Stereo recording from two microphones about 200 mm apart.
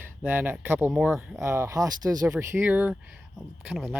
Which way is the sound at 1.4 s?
15° right (ahead or behind).